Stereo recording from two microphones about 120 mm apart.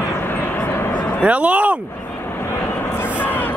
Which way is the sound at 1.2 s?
10° right (ahead or behind).